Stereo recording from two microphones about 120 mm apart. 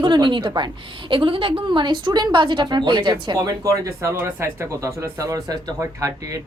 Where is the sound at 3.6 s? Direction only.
25° right (ahead or behind).